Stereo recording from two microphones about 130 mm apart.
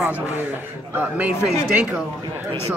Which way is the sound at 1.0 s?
10° right (ahead or behind).